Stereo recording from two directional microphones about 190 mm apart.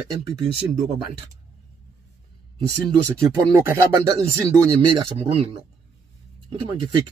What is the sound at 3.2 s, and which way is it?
Speech, 15° right (ahead or behind).